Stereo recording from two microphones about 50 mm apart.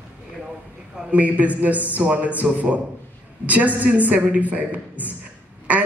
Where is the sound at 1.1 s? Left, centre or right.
Right.